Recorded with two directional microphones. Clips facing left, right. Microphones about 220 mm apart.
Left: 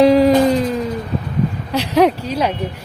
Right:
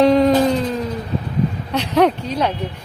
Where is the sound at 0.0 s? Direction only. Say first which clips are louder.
Left 2 dB; 10° left (ahead or behind).